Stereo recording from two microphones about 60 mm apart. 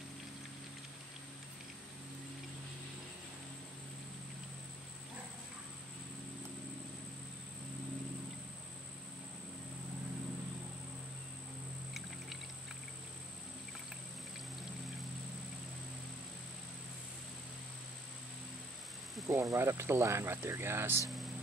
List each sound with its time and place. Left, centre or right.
19.2 s speech: right